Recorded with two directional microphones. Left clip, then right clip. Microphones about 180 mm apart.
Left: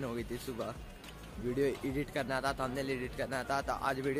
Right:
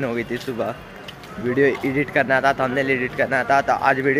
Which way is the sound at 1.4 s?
15° left (ahead or behind).